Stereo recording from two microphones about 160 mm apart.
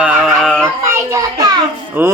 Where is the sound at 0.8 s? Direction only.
20° right (ahead or behind).